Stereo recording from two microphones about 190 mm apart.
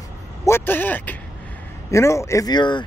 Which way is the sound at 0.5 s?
10° left (ahead or behind).